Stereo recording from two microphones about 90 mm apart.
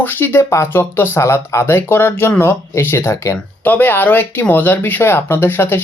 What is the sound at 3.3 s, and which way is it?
Speech, 20° left (ahead or behind).